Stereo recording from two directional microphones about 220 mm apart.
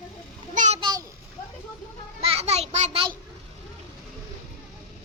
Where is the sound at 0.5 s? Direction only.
35° right (ahead or behind).